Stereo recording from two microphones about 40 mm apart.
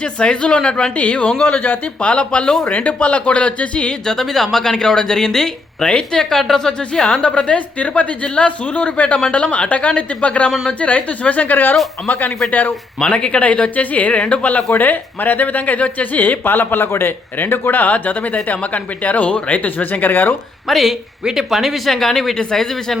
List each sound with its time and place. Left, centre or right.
0.0 s a woman's voice: left
0.9 s a woman's voice: left
4.0 s speech: centre; by 12.7 s left
13.1 s speech: left
14.7 s speech: left
17.7 s speech: left
20.7 s speech: centre
21.8 s speech: centre